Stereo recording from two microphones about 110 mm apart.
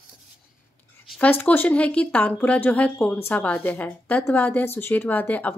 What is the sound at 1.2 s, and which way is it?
A woman's voice, 15° left (ahead or behind).